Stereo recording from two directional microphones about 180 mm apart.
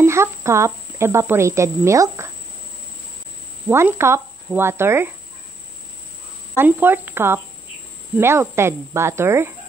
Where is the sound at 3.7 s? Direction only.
15° right (ahead or behind).